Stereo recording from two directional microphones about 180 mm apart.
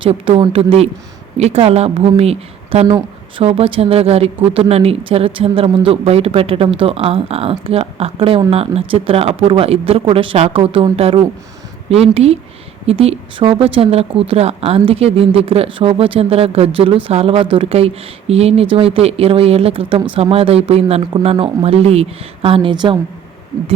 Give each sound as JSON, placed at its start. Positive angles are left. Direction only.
{"t": 0.0, "sound": "speech", "side_deg": -30}
{"t": 2.8, "sound": "speech", "side_deg": -20}
{"t": 3.4, "sound": "speech", "side_deg": -30}